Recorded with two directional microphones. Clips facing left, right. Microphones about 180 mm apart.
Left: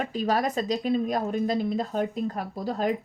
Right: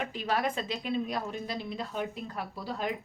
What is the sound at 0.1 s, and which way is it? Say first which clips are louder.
A woman's voice: left 5 dB; 40° left (ahead or behind).